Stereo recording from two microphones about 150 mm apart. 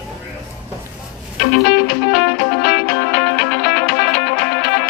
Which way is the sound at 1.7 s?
90° left.